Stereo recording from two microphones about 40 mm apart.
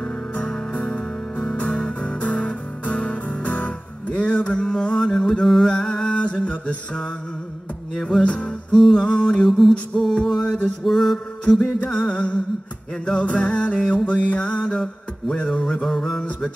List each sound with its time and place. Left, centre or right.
0.0 s music: left
5.7 s mantra: left
7.9 s music: centre
8.9 s music: left
9.5 s music: centre
10.8 s mantra: centre
11.6 s music: left
15.8 s a sound: centre